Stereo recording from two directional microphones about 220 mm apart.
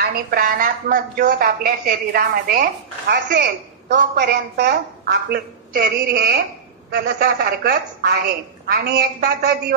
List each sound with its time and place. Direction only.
0.0 s a woman's voice: 40° right (ahead or behind)